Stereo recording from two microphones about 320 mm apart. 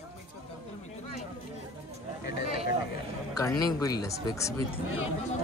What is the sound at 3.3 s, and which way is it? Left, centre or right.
Speech, centre.